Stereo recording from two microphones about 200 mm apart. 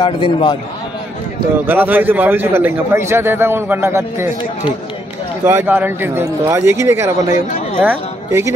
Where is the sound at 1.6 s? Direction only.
10° right (ahead or behind).